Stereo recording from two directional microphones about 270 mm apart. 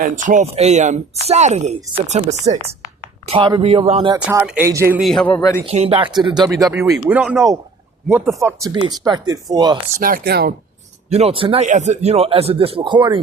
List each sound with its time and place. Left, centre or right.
0.0 s speech: right; by 5.5 s centre
5.6 s speech: right
10.0 s speech: right
11.1 s speech: right